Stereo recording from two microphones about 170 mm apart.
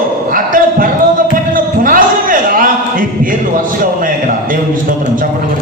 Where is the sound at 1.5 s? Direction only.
55° right (ahead or behind).